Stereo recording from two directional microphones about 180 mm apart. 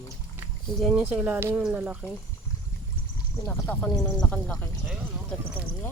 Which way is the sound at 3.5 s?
10° left (ahead or behind).